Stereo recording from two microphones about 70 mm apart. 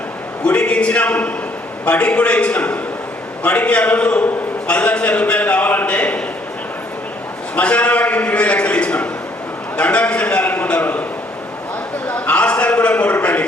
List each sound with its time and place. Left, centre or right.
0.4 s a man's voice: centre
7.5 s a man's voice: centre
12.0 s a man's voice: left